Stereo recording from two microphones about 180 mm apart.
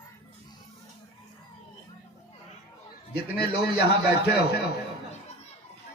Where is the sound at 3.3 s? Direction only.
60° left (ahead or behind).